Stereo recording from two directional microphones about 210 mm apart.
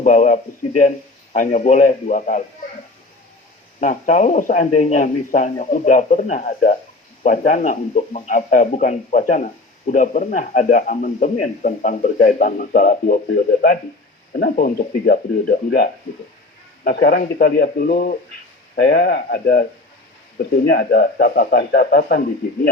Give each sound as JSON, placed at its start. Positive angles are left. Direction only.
{"t": 0.0, "sound": "speech", "side_deg": 35}
{"t": 3.8, "sound": "a man's voice", "side_deg": 35}